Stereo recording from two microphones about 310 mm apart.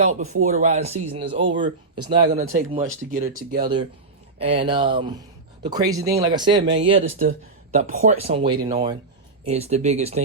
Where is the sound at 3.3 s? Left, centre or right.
Centre.